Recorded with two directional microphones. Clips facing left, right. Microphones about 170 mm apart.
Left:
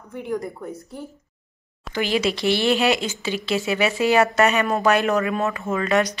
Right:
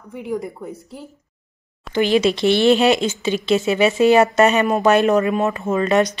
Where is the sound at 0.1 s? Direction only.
5° right (ahead or behind).